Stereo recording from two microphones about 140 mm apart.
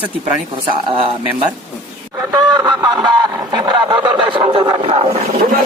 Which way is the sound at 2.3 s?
25° right (ahead or behind).